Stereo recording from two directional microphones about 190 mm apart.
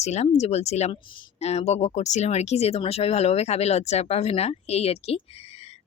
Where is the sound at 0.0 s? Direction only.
35° left (ahead or behind).